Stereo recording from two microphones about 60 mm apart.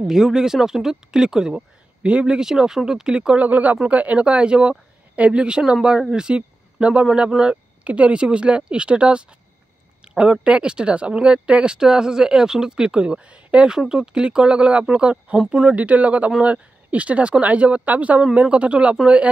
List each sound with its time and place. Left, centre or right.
0.0 s speech: centre
3.4 s speech: right
15.3 s speech: centre
15.7 s speech: right